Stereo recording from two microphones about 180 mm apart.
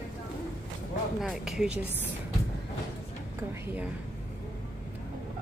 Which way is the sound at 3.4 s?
10° right (ahead or behind).